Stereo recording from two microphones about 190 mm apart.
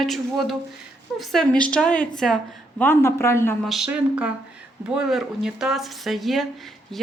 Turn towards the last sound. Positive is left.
turn(degrees=0)  # may be behind; listen again after turning